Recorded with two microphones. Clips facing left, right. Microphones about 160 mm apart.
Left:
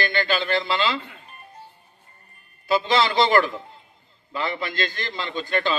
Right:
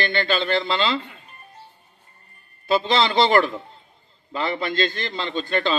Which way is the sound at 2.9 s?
25° right (ahead or behind).